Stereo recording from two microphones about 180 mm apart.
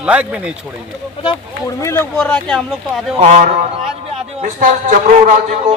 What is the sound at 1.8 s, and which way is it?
Speech, 15° left (ahead or behind).